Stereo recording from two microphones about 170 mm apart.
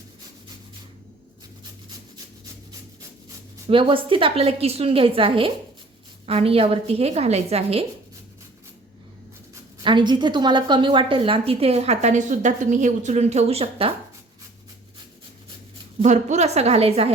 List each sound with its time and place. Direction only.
3.7 s a woman's voice: 30° right (ahead or behind)
9.8 s a woman's voice: 25° right (ahead or behind)
16.0 s a woman's voice: 45° right (ahead or behind)